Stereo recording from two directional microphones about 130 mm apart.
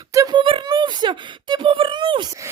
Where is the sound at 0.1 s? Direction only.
25° right (ahead or behind).